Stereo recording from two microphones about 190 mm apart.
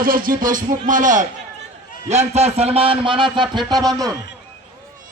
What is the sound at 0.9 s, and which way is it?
A man's voice, 40° right (ahead or behind).